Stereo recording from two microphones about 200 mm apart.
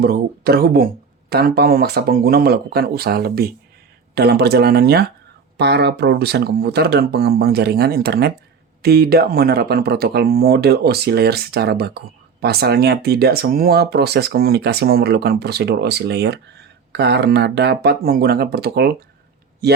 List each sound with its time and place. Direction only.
0.0 s speech: 50° right (ahead or behind)